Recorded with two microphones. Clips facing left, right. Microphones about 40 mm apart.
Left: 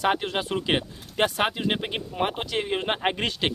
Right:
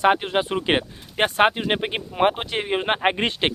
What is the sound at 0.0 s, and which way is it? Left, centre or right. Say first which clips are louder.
Speech: right 5 dB; centre.